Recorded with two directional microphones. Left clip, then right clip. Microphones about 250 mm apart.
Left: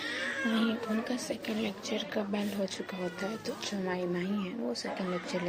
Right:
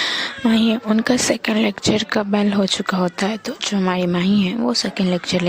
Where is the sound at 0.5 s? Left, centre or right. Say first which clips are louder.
Right 13 dB; right.